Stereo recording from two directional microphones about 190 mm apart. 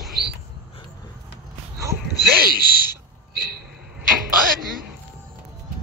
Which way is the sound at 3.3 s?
50° right (ahead or behind).